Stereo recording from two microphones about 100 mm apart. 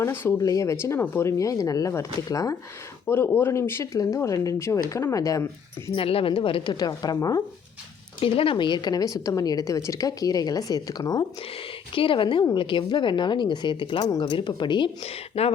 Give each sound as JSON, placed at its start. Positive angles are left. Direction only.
{"t": 0.0, "sound": "a woman's voice", "side_deg": 25}
{"t": 3.1, "sound": "a woman's voice", "side_deg": 20}
{"t": 5.9, "sound": "speech", "side_deg": 70}
{"t": 6.7, "sound": "a woman's voice", "side_deg": 40}
{"t": 8.2, "sound": "a woman's voice", "side_deg": 65}
{"t": 11.9, "sound": "a woman's voice", "side_deg": 55}
{"t": 14.0, "sound": "a woman's voice", "side_deg": 45}
{"t": 15.0, "sound": "speech", "side_deg": 85}